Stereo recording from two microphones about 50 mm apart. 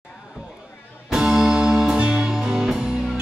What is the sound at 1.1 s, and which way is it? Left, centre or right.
Music, centre.